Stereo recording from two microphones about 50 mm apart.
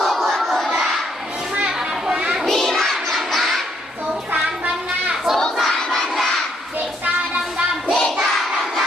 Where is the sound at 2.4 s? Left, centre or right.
Centre.